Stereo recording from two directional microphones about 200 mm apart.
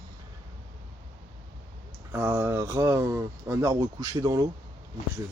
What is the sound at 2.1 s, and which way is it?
Speech, 10° right (ahead or behind).